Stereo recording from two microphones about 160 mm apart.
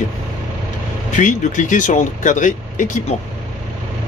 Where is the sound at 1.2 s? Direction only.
50° left (ahead or behind).